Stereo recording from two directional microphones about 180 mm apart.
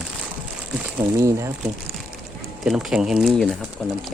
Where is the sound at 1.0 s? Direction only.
15° right (ahead or behind).